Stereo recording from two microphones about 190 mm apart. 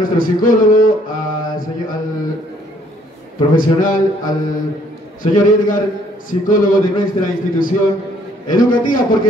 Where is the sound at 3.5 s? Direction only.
45° left (ahead or behind).